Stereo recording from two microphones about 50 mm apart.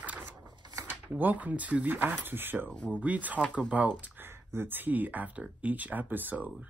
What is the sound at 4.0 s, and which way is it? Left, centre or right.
Speech, right.